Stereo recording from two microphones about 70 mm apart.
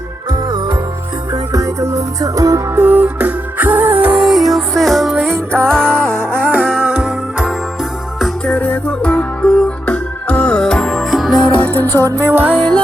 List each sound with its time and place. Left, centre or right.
0.3 s music: right
1.3 s music: right
2.7 s music: right
4.2 s music: centre
5.7 s music: right
7.0 s music: centre
8.4 s music: centre
11.6 s music: left
12.2 s music: right